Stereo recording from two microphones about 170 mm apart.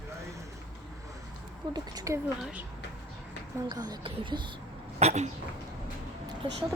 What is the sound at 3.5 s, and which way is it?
A woman's voice, 20° right (ahead or behind).